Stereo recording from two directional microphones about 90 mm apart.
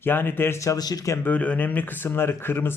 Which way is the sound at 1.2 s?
15° left (ahead or behind).